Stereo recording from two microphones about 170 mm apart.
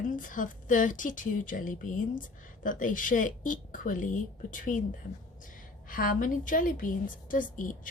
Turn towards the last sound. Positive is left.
turn(degrees=50)  # may be behind; listen again after turning